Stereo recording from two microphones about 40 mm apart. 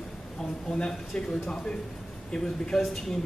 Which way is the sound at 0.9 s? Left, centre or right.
Centre.